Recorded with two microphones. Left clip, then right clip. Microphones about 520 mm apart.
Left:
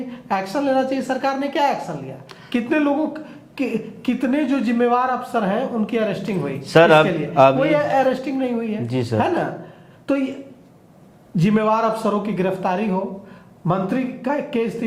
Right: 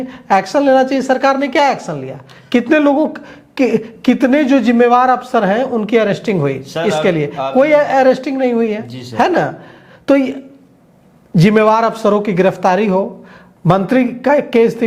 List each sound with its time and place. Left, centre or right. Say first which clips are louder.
0.1 s a woman's voice: right 10 dB; right
6.6 s speech: left 4 dB; left
7.6 s a woman's voice: right 7 dB; right
8.9 s speech: left 7 dB; left
9.1 s a woman's voice: right 8 dB; right
11.3 s a woman's voice: right 8 dB; right